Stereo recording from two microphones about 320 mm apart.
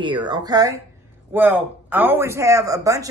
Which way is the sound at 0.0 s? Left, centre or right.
Centre.